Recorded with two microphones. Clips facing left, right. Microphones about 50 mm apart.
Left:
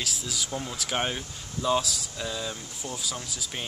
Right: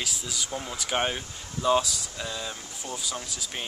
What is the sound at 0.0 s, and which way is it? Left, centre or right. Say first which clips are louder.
Speech: even; centre.